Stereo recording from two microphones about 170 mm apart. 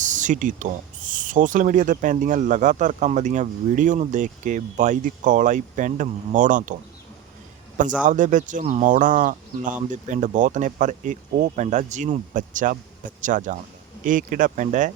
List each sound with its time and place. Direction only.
0.0 s speech: 45° right (ahead or behind)
8.0 s speech: 50° right (ahead or behind)